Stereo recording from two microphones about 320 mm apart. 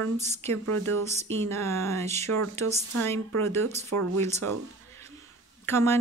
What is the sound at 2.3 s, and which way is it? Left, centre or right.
Speech, right.